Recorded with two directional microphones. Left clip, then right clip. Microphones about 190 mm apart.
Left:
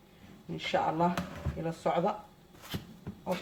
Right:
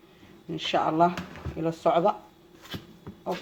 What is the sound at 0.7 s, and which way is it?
Speech, 50° right (ahead or behind).